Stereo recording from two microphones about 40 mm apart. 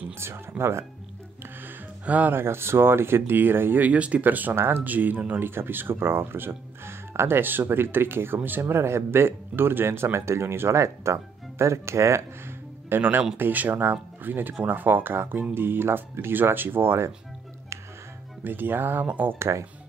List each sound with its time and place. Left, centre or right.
0.2 s speech: right
2.0 s speech: right
2.3 s speech: right
3.8 s speech: right
4.2 s speech: right
4.6 s speech: right
4.8 s speech: right
5.4 s speech: right
8.4 s speech: right
8.6 s speech: right
12.9 s speech: right
13.4 s speech: right
18.4 s speech: right